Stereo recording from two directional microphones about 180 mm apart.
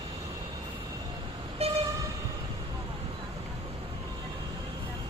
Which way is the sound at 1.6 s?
35° right (ahead or behind).